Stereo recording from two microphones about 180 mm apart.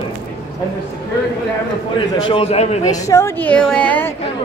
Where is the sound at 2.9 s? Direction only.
15° left (ahead or behind).